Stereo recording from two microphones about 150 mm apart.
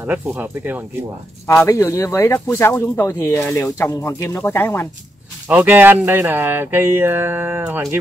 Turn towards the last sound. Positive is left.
turn(degrees=-15)  # may be behind; listen again after turning